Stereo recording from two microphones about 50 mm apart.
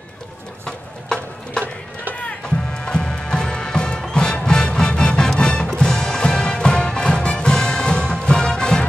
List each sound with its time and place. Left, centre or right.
0.7 s music: centre